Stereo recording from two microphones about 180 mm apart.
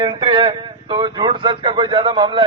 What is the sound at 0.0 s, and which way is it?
A man's voice, 20° right (ahead or behind).